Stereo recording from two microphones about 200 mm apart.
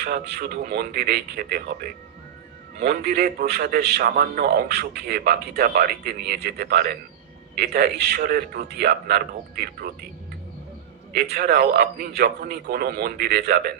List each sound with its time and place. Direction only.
0.0 s a man's voice: 55° right (ahead or behind)
11.1 s a man's voice: 55° right (ahead or behind)